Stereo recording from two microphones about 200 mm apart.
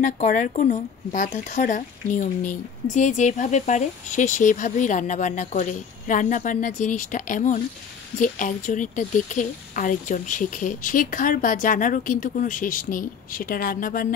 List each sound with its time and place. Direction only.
0.0 s speech: 40° left (ahead or behind)